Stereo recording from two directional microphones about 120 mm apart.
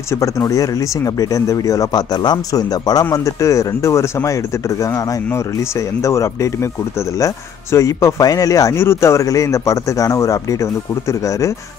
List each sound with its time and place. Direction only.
0.1 s speech: 25° left (ahead or behind)